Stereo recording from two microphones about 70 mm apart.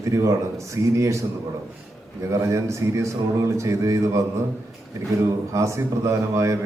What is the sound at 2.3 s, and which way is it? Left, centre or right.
A man's voice, right.